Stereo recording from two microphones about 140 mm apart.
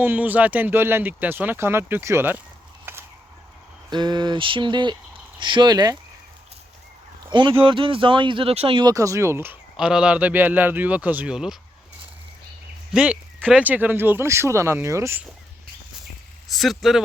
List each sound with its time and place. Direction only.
0.0 s speech: 10° right (ahead or behind)
2.9 s a sound: 15° right (ahead or behind)
3.8 s speech: 30° right (ahead or behind)
7.3 s speech: 35° right (ahead or behind)
8.8 s speech: 25° right (ahead or behind)
9.7 s speech: 5° right (ahead or behind)
12.9 s speech: 5° right (ahead or behind)
16.5 s speech: centre (ahead or behind)